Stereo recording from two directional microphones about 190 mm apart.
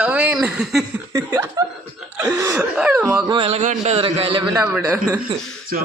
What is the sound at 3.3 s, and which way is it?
A man's voice, 30° right (ahead or behind).